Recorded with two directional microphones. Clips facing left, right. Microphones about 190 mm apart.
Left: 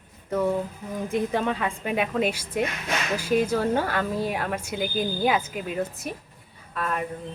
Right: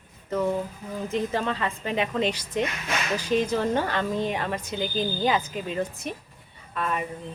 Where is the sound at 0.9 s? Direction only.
10° left (ahead or behind).